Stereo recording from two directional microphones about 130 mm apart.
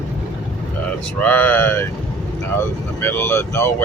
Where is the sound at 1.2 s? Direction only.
10° left (ahead or behind).